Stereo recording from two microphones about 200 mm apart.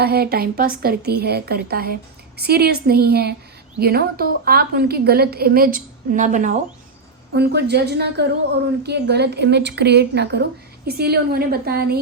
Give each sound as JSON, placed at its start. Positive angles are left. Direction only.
{"t": 0.0, "sound": "a woman's voice", "side_deg": -50}
{"t": 7.3, "sound": "a woman's voice", "side_deg": -55}